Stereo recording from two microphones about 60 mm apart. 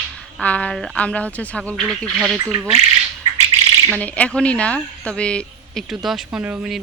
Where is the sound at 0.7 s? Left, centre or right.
Centre.